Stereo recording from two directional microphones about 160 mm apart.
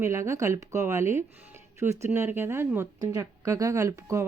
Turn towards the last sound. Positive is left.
turn(degrees=-20)  # may be behind; listen again after turning